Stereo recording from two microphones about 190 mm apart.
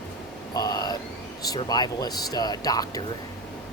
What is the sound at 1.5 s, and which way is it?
Speech, 20° left (ahead or behind).